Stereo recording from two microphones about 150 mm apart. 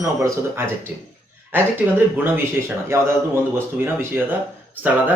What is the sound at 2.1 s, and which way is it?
Speech, 15° right (ahead or behind).